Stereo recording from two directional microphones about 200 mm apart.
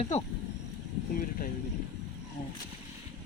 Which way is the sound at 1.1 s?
45° left (ahead or behind).